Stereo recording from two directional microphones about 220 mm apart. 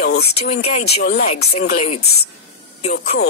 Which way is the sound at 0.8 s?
45° left (ahead or behind).